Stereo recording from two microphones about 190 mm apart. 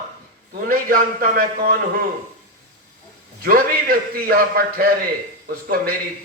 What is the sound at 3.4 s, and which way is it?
A man's voice, 50° right (ahead or behind).